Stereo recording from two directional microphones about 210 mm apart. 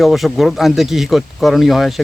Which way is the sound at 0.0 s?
Centre (ahead or behind).